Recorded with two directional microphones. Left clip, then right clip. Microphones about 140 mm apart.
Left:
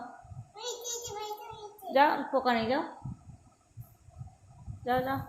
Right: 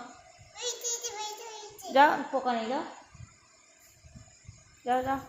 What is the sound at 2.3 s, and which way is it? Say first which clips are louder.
Babbling: left 2 dB; 10° left (ahead or behind).